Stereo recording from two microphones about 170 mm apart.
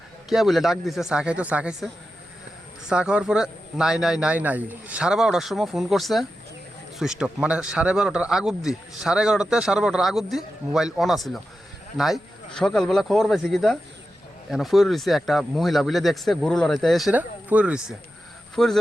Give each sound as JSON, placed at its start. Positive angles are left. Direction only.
{"t": 0.3, "sound": "a man's voice", "side_deg": 0}